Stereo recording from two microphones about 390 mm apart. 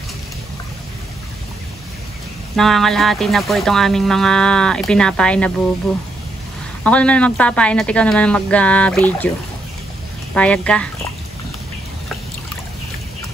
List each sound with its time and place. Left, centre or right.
2.5 s speech: centre
6.8 s speech: centre
10.3 s speech: centre